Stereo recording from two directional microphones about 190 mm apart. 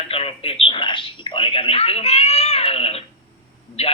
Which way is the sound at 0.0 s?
30° left (ahead or behind).